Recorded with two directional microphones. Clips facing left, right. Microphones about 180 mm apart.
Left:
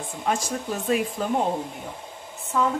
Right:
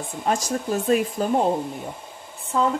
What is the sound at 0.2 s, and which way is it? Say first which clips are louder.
Speech: right 3 dB; 40° right (ahead or behind).